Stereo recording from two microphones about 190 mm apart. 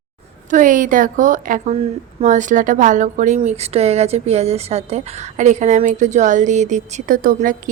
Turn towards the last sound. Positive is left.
turn(degrees=-45)  # may be behind; listen again after turning